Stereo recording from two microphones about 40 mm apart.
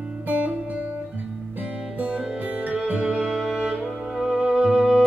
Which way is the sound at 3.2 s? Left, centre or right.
Centre.